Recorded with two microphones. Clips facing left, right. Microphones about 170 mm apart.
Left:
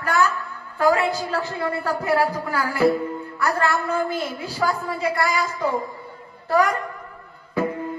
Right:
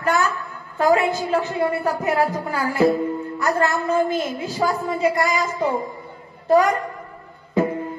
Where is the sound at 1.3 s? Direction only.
20° right (ahead or behind).